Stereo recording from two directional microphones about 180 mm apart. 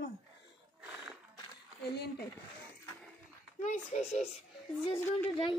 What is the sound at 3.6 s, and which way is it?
Speech, 40° left (ahead or behind).